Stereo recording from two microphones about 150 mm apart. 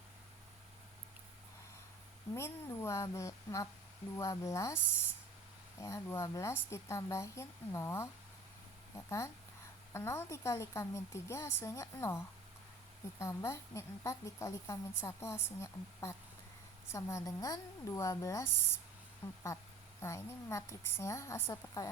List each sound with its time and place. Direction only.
2.3 s a woman's voice: 20° left (ahead or behind)
5.8 s a woman's voice: 20° left (ahead or behind)